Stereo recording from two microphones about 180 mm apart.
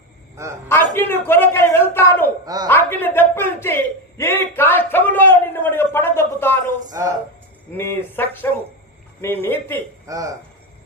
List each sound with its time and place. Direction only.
0.7 s a man's voice: 10° left (ahead or behind)
7.0 s speech: 15° right (ahead or behind)
7.7 s a man's voice: 10° left (ahead or behind)
10.1 s speech: 20° right (ahead or behind)